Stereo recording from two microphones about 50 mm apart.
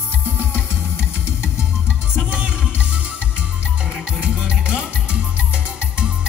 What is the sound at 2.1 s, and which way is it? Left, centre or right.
Music, right.